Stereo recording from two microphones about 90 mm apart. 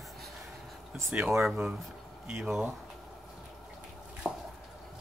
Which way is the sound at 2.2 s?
25° right (ahead or behind).